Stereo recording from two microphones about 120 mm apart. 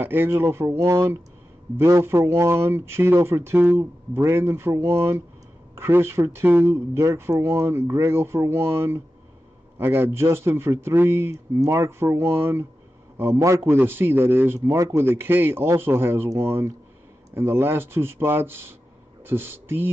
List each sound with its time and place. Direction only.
0.0 s a man's voice: 20° right (ahead or behind)